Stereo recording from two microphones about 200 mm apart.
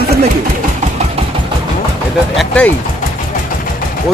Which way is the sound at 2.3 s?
5° left (ahead or behind).